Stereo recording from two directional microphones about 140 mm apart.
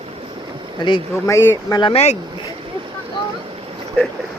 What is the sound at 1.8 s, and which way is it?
Speech, 45° left (ahead or behind).